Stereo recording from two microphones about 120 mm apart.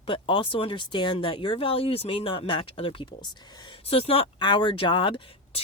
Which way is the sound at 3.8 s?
55° left (ahead or behind).